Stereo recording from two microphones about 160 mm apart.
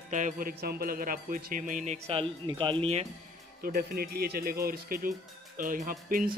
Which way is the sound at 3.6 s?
70° right (ahead or behind).